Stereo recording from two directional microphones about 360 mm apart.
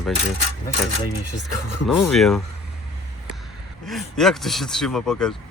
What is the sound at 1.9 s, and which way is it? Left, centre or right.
Speech, centre.